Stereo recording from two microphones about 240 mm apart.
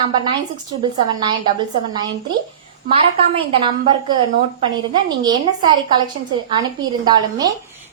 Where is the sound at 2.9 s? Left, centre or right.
Right.